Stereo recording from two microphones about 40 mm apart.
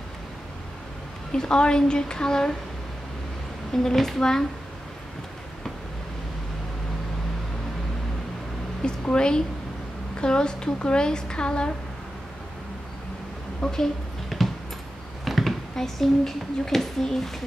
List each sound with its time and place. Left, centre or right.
1.3 s a woman's voice: left
3.7 s a woman's voice: centre
9.1 s a woman's voice: left
13.6 s a woman's voice: centre
14.3 s a sound: centre
15.2 s speech: centre